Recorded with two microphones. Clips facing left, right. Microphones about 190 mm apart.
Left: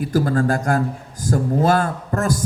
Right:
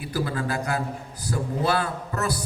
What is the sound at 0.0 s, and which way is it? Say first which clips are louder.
A man's voice: left 9 dB; 45° left (ahead or behind).